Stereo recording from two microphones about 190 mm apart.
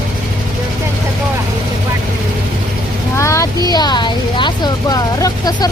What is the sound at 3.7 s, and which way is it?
Speech, 20° left (ahead or behind).